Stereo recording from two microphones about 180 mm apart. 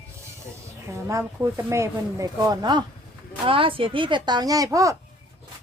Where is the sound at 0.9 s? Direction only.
15° right (ahead or behind).